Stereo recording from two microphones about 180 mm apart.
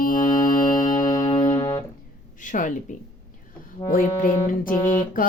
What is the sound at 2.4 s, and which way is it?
Music, 45° left (ahead or behind).